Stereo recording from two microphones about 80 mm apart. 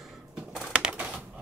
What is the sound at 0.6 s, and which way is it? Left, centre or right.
Crushing, centre.